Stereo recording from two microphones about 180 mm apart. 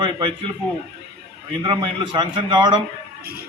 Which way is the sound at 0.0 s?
25° right (ahead or behind).